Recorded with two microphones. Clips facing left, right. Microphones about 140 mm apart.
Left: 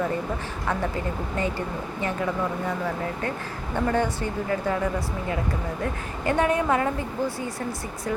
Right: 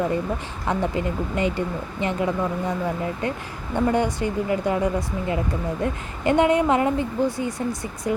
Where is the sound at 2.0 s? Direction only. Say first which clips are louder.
Right 3 dB; 20° right (ahead or behind).